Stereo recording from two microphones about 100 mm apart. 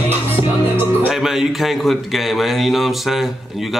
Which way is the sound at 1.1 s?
5° right (ahead or behind).